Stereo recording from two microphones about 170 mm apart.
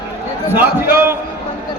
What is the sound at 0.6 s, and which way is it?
Speech, 15° right (ahead or behind).